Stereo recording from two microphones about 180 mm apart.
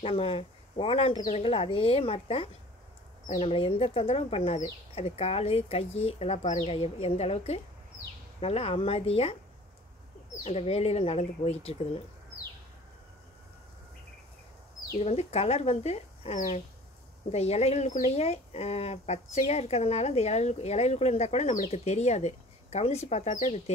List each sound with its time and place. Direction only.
0.0 s speech: 30° left (ahead or behind)
10.4 s speech: 35° left (ahead or behind)
15.0 s speech: 35° left (ahead or behind)